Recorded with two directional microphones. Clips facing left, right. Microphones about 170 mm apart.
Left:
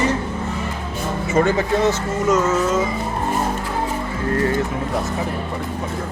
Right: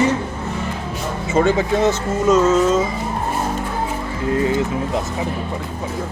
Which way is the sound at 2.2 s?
30° right (ahead or behind).